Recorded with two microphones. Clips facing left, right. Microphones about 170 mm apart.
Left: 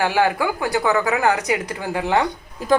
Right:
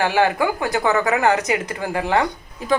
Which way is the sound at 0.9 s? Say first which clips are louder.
Right 2 dB; 10° left (ahead or behind).